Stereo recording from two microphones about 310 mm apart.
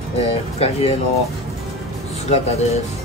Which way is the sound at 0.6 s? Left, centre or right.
Centre.